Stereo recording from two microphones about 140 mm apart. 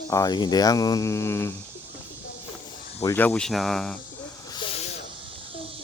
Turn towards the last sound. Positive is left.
turn(degrees=45)  # may be behind; listen again after turning